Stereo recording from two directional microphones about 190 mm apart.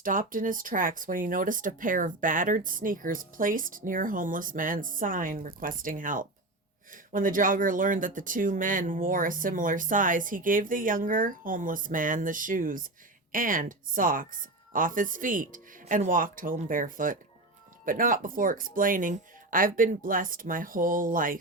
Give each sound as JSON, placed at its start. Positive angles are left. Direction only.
{"t": 0.0, "sound": "speech", "side_deg": -45}